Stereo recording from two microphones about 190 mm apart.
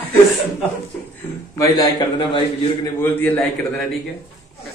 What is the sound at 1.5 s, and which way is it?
Speech, 20° left (ahead or behind).